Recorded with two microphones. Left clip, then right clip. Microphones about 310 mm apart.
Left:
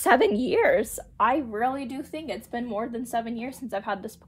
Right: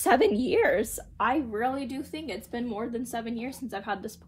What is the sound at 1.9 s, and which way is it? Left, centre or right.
Speech, centre.